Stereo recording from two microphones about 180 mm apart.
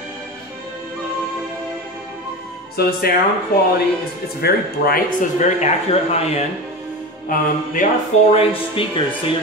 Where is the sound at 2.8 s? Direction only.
60° left (ahead or behind).